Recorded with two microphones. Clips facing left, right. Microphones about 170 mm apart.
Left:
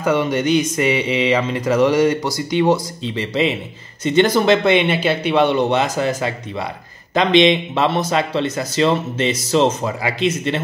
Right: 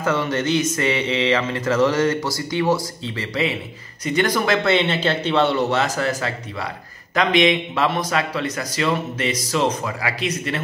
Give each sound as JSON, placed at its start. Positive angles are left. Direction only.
{"t": 0.0, "sound": "a man's voice", "side_deg": 15}